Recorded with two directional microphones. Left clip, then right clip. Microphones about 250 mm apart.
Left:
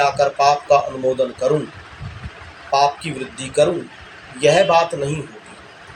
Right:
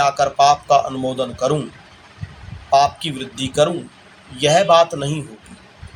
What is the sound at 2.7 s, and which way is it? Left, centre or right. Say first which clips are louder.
Speech: right 2 dB; right.